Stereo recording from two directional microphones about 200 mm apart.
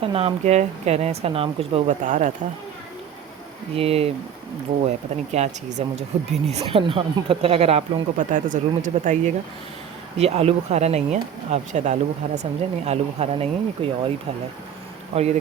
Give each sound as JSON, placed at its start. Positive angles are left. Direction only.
{"t": 0.0, "sound": "speech", "side_deg": -25}
{"t": 3.8, "sound": "speech", "side_deg": -30}
{"t": 15.1, "sound": "speech", "side_deg": -30}